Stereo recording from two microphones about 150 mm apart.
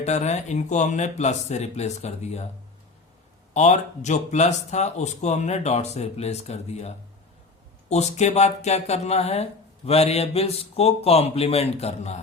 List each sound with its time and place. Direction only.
0.0 s speech: 50° left (ahead or behind)
3.5 s speech: 50° left (ahead or behind)